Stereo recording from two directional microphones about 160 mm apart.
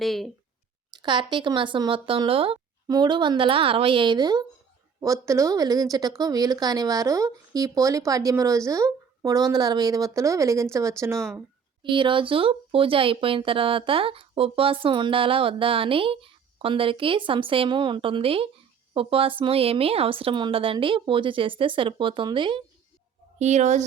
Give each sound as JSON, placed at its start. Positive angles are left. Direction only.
{"t": 0.0, "sound": "speech", "side_deg": 0}
{"t": 0.9, "sound": "speech", "side_deg": -30}
{"t": 11.8, "sound": "speech", "side_deg": -30}
{"t": 23.4, "sound": "speech", "side_deg": -45}